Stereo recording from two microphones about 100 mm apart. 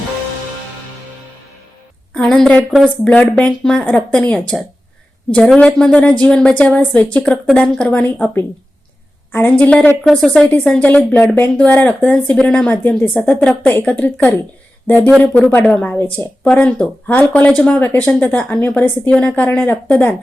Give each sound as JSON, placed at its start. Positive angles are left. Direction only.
{"t": 2.2, "sound": "speech", "side_deg": 0}
{"t": 3.0, "sound": "speech", "side_deg": 10}
{"t": 10.1, "sound": "speech", "side_deg": 0}
{"t": 12.7, "sound": "speech", "side_deg": 20}